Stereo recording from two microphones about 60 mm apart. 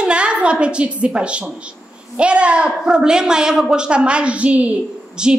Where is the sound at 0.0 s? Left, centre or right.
Centre.